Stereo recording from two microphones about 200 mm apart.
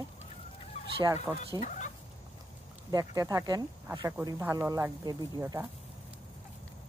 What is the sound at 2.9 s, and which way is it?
Speech, 15° right (ahead or behind).